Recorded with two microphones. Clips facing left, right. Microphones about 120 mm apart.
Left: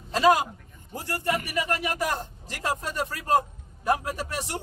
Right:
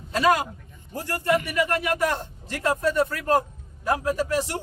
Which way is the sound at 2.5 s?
20° left (ahead or behind).